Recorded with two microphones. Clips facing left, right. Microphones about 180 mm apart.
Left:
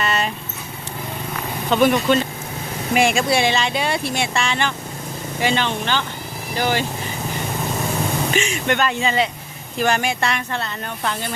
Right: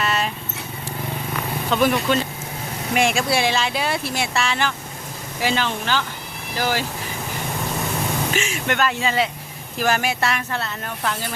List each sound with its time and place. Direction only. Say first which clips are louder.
0.0 s vehicle: left 1 dB; centre (ahead or behind)
1.7 s speech: left 3 dB; centre (ahead or behind)
8.4 s speech: left 3 dB; centre (ahead or behind)